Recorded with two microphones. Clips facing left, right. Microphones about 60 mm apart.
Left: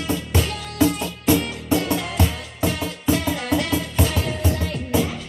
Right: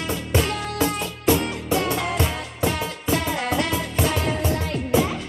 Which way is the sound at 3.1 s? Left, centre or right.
Right.